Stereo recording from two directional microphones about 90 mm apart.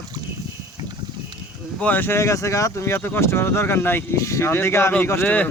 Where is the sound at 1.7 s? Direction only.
20° left (ahead or behind).